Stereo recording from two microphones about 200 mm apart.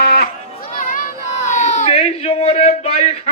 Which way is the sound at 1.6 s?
40° left (ahead or behind).